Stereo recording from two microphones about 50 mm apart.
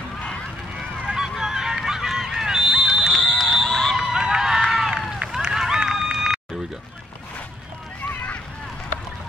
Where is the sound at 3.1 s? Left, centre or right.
Centre.